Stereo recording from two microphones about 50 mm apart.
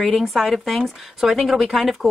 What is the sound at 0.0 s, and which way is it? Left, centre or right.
Speech, centre.